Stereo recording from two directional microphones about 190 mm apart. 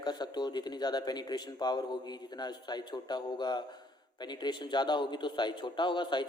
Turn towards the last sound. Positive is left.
turn(degrees=25)  # may be behind; listen again after turning